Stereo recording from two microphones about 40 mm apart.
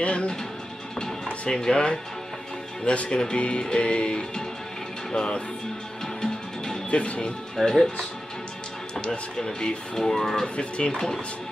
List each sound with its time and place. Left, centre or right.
0.0 s speech: left
1.4 s music: left
6.9 s music: left
7.7 s speech: centre
9.0 s speech: left
10.5 s music: left